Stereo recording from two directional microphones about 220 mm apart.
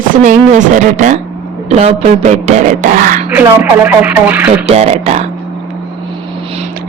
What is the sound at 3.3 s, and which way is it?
Speech, 5° right (ahead or behind).